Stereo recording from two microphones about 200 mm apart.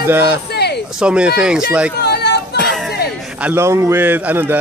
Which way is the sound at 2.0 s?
55° left (ahead or behind).